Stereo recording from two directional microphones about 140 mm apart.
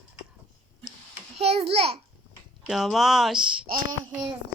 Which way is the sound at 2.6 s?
Centre (ahead or behind).